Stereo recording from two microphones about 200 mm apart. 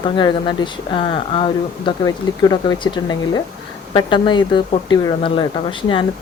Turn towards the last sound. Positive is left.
turn(degrees=25)  # may be behind; listen again after turning